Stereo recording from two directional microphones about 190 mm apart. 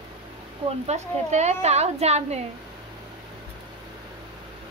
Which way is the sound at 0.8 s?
35° right (ahead or behind).